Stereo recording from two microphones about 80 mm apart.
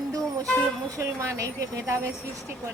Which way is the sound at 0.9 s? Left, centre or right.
Right.